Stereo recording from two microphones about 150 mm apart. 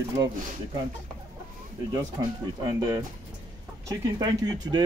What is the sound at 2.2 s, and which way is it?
Speech, 25° right (ahead or behind).